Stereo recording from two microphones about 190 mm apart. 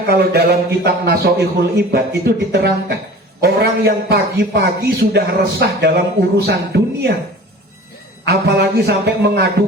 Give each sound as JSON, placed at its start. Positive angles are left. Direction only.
{"t": 0.1, "sound": "a man's voice", "side_deg": -55}
{"t": 8.2, "sound": "a man's voice", "side_deg": -60}